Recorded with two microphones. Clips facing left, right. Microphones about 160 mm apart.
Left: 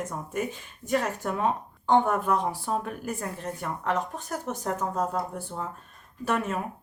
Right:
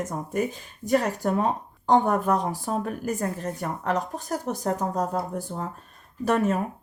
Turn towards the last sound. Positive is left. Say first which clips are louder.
# right 5 dB
turn(degrees=-40)  # may be behind; listen again after turning